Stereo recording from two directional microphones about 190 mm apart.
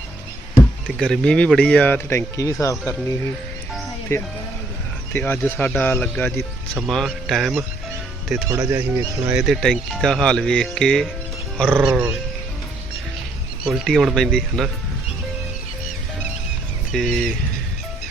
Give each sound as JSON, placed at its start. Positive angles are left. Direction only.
{"t": 0.5, "sound": "speech", "side_deg": 5}
{"t": 5.1, "sound": "speech", "side_deg": 10}
{"t": 8.4, "sound": "speech", "side_deg": -15}
{"t": 9.2, "sound": "speech", "side_deg": -5}
{"t": 13.7, "sound": "speech", "side_deg": 0}
{"t": 16.9, "sound": "speech", "side_deg": 0}